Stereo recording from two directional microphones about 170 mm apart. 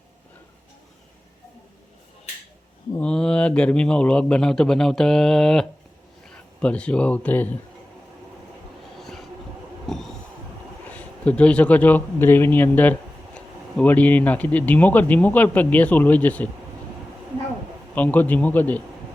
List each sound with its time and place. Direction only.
3.0 s a man's voice: 5° left (ahead or behind)
9.0 s train: centre (ahead or behind)
9.8 s a sound: centre (ahead or behind)
10.9 s speech: 10° left (ahead or behind)
17.9 s speech: 10° left (ahead or behind)